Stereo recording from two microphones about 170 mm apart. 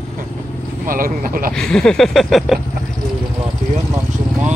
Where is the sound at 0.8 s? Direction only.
55° right (ahead or behind).